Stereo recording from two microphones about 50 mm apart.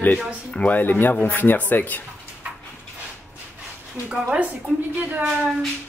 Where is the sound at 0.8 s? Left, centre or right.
Left.